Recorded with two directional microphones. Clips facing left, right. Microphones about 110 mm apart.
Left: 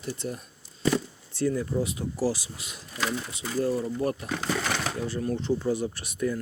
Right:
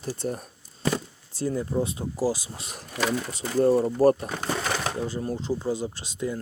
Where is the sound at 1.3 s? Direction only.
25° right (ahead or behind).